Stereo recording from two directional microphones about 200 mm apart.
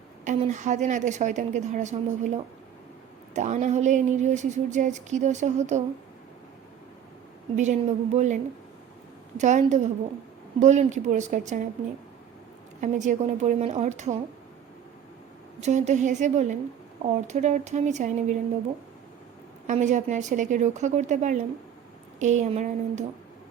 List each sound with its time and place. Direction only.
0.3 s speech: 35° right (ahead or behind)
7.5 s speech: 35° right (ahead or behind)
9.4 s speech: 35° right (ahead or behind)
12.8 s speech: 40° right (ahead or behind)
15.6 s speech: 35° right (ahead or behind)
19.6 s speech: 35° right (ahead or behind)